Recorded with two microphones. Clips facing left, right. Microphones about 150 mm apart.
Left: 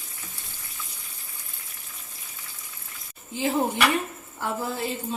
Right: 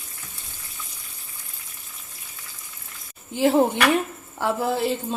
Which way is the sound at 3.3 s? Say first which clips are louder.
Right 6 dB; 70° right (ahead or behind).